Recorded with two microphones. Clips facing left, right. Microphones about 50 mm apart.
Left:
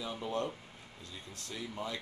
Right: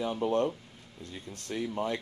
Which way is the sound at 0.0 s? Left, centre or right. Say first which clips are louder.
Right 8 dB; right.